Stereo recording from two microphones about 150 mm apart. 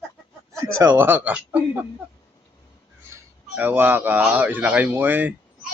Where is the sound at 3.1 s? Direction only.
15° right (ahead or behind).